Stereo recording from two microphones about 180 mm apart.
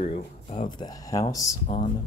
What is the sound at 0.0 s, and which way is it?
Speech, 35° left (ahead or behind).